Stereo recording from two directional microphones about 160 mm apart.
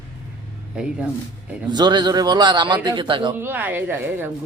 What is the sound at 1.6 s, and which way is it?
A man's voice, 25° right (ahead or behind).